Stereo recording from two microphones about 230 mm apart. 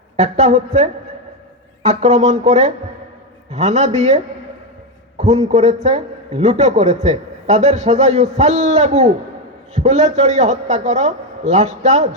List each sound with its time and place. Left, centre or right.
0.2 s a man's voice: right